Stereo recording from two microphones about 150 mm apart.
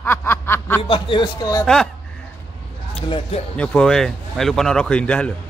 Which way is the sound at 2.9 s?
40° left (ahead or behind).